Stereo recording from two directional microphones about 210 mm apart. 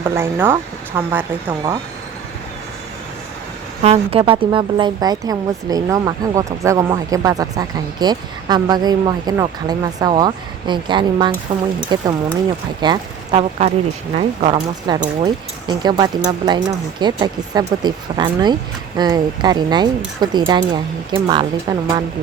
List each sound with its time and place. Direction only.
0.0 s speech: 10° right (ahead or behind)
3.8 s speech: 30° right (ahead or behind)